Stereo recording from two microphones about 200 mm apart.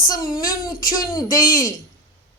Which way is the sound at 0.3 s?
45° left (ahead or behind).